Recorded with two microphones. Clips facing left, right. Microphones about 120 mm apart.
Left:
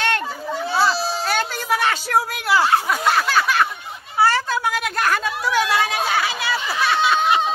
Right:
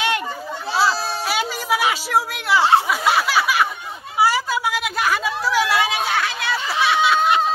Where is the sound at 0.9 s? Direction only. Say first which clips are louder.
Left 2 dB; 55° right (ahead or behind).